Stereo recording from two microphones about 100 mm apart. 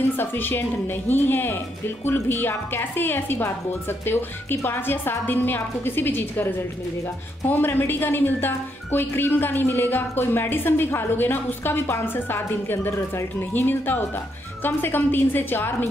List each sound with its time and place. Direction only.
0.2 s a woman's voice: 20° left (ahead or behind)
7.4 s a woman's voice: 20° left (ahead or behind)